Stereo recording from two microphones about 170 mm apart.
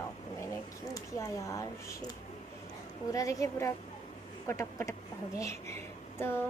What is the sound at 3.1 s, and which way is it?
A woman's voice, 20° left (ahead or behind).